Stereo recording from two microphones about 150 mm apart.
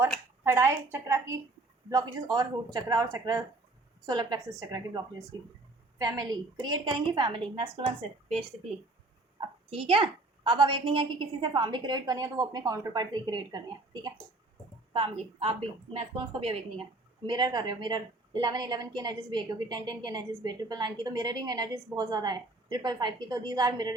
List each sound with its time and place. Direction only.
0.4 s a woman's voice: 15° right (ahead or behind); by 8.4 s 45° right (ahead or behind)
9.6 s a woman's voice: 40° right (ahead or behind)